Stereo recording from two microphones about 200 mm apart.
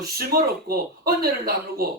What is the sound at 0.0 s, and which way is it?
Speech, 50° right (ahead or behind).